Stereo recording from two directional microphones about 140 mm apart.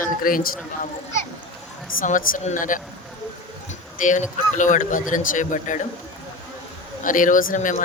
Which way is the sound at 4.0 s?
65° left (ahead or behind).